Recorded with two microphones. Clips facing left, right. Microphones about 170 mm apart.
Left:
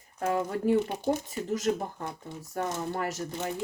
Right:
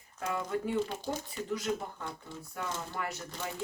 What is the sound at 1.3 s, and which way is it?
Speech, 40° left (ahead or behind).